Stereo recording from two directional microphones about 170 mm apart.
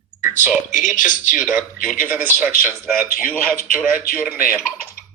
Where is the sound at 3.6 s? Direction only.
60° left (ahead or behind).